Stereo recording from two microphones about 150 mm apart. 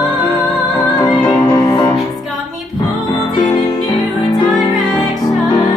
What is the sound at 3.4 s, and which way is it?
Music, 30° left (ahead or behind).